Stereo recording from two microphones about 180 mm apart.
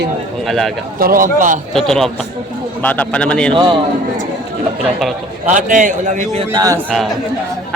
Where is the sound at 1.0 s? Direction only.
50° right (ahead or behind).